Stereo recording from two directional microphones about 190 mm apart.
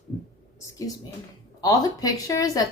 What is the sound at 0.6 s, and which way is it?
Speech, 15° left (ahead or behind).